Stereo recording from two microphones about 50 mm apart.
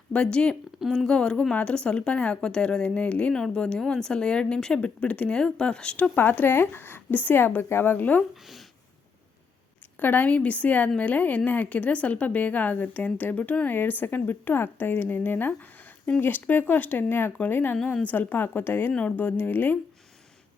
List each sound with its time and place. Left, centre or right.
0.1 s a woman's voice: left
3.3 s a woman's voice: centre
6.1 s speech: left
8.4 s speech: centre
10.0 s a woman's voice: left
10.2 s a woman's voice: left